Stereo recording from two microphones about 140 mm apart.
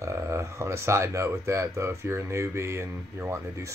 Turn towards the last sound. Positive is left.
turn(degrees=-20)  # may be behind; listen again after turning